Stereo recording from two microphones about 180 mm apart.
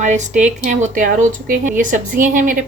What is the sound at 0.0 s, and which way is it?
Speech, 40° right (ahead or behind).